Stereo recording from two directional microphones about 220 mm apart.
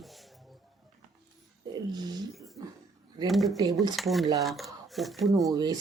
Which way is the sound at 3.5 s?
15° right (ahead or behind).